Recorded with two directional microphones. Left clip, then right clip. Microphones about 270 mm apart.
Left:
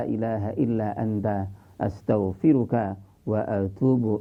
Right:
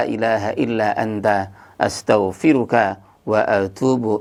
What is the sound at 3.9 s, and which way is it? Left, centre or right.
Speech, right.